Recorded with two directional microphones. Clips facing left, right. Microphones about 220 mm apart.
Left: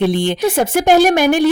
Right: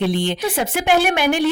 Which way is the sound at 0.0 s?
50° left (ahead or behind).